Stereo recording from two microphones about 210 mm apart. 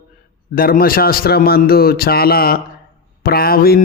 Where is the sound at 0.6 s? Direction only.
45° left (ahead or behind).